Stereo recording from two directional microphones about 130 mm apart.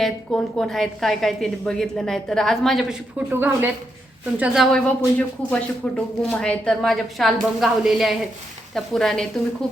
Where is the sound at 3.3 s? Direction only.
15° right (ahead or behind).